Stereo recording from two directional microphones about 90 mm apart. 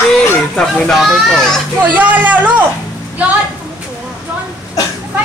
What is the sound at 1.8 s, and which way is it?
Speech, 20° right (ahead or behind).